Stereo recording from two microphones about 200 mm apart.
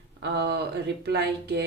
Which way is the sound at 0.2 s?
55° right (ahead or behind).